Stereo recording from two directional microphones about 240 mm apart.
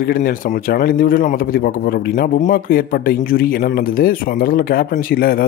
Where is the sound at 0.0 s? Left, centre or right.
Left.